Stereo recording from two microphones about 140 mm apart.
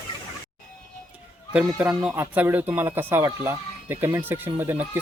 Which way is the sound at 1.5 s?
10° right (ahead or behind).